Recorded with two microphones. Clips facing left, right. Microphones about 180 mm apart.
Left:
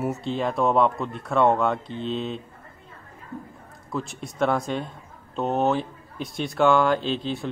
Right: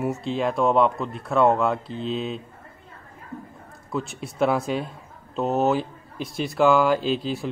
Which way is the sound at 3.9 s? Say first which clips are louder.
Right 2 dB; centre (ahead or behind).